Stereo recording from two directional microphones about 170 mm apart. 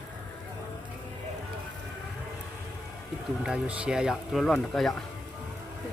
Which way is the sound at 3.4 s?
5° right (ahead or behind).